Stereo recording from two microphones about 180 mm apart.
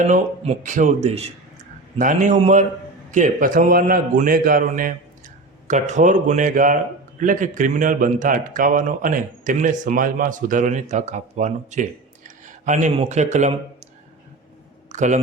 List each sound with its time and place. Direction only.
0.0 s a man's voice: 45° right (ahead or behind)
12.5 s a sound: 45° right (ahead or behind)
13.0 s a man's voice: 40° right (ahead or behind)
14.9 s speech: 40° right (ahead or behind)